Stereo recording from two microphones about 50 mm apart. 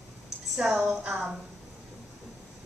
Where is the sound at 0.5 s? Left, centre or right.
Centre.